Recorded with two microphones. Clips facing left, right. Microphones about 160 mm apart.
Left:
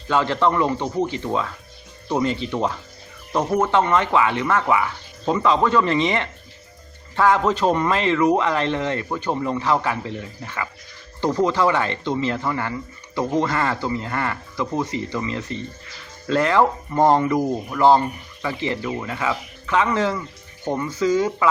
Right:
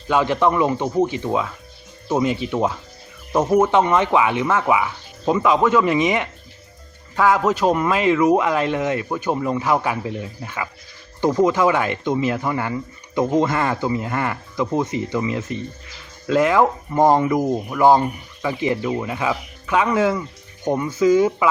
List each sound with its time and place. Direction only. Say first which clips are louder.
0.1 s speech: right 2 dB; 15° right (ahead or behind)